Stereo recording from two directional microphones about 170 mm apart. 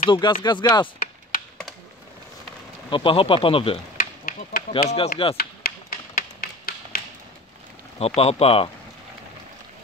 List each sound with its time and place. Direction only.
0.1 s speech: 25° left (ahead or behind)
0.9 s a sound: 55° left (ahead or behind)
2.9 s speech: 30° left (ahead or behind)
3.9 s a sound: 55° left (ahead or behind)
4.8 s speech: 40° left (ahead or behind)
5.4 s tap: 60° left (ahead or behind)
8.2 s speech: 35° left (ahead or behind)